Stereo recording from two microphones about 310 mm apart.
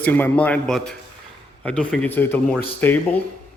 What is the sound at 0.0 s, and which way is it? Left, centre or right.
Speech, centre.